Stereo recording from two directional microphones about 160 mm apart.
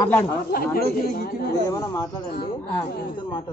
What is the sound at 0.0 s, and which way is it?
Speech, 15° left (ahead or behind).